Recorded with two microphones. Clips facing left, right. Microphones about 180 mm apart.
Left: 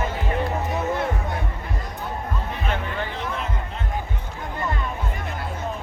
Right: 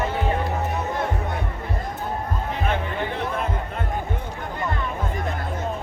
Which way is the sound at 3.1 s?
60° right (ahead or behind).